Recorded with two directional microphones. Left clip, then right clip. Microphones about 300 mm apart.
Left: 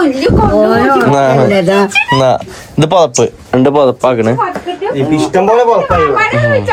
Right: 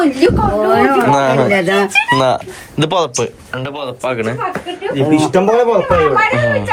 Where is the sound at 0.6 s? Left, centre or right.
Centre.